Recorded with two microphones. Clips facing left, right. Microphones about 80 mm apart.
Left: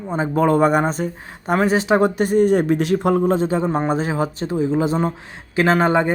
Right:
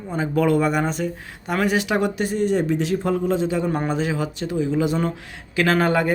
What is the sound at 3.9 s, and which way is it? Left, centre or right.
A man's voice, left.